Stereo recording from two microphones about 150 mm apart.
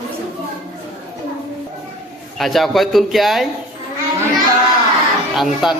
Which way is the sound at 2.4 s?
Centre (ahead or behind).